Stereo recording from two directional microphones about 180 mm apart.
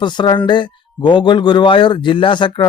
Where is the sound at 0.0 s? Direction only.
25° left (ahead or behind).